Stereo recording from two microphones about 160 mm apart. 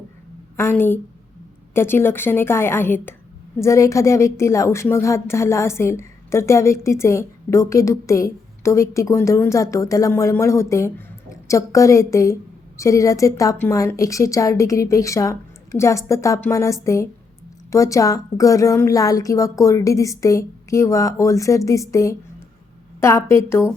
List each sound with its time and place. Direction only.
0.5 s a woman's voice: 15° left (ahead or behind)